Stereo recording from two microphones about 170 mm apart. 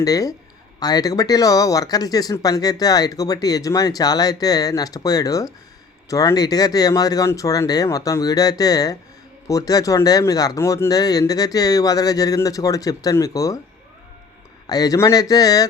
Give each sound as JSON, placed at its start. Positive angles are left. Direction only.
{"t": 0.0, "sound": "speech", "side_deg": 20}
{"t": 14.7, "sound": "speech", "side_deg": 20}